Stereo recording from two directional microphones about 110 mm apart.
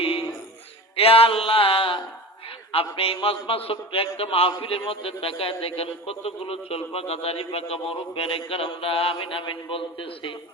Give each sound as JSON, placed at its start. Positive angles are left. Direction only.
{"t": 0.0, "sound": "music", "side_deg": 60}
{"t": 0.9, "sound": "a man's voice", "side_deg": 60}